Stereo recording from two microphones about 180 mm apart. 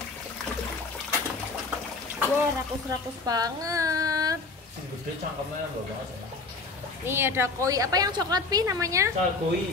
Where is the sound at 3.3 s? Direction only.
20° right (ahead or behind).